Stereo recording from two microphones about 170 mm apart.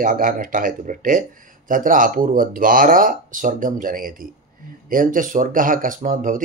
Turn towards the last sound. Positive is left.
turn(degrees=-50)  # may be behind; listen again after turning